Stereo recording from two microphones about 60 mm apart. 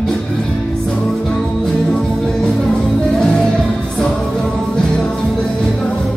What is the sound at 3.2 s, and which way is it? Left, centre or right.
Music, centre.